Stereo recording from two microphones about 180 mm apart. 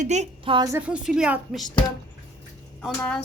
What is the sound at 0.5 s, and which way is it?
Speech, 20° right (ahead or behind).